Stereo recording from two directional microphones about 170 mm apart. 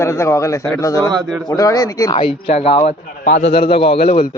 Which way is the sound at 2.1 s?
35° left (ahead or behind).